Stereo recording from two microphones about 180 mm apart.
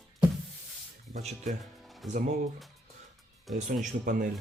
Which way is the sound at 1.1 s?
35° right (ahead or behind).